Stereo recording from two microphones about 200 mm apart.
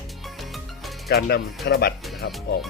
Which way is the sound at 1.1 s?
50° left (ahead or behind).